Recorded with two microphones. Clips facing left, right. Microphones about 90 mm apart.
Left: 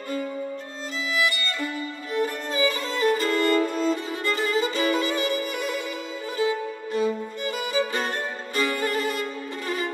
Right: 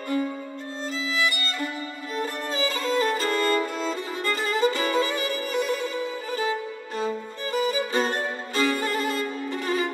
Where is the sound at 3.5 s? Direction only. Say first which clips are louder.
Left 3 dB; 25° right (ahead or behind).